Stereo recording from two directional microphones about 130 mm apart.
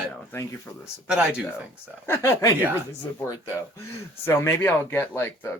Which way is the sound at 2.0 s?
15° left (ahead or behind).